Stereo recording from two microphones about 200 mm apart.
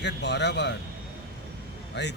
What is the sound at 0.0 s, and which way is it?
Speech, 60° left (ahead or behind).